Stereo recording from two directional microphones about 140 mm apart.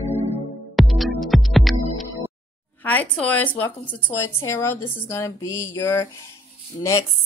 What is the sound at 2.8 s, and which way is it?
A woman's voice, 10° left (ahead or behind).